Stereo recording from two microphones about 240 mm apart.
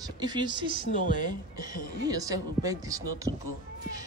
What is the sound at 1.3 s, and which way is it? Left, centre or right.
Speech, centre.